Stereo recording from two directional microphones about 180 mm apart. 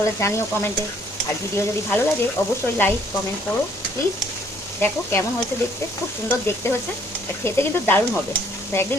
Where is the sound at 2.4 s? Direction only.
15° left (ahead or behind).